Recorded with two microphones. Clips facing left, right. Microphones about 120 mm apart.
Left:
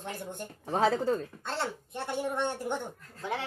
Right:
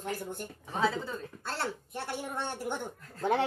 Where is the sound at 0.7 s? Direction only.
40° left (ahead or behind).